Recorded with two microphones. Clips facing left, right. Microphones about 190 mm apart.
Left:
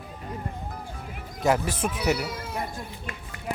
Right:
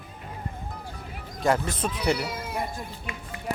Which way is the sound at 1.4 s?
10° left (ahead or behind).